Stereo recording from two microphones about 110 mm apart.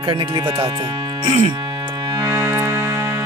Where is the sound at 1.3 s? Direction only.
60° right (ahead or behind).